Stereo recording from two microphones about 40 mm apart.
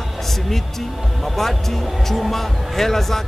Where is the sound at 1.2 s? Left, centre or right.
Centre.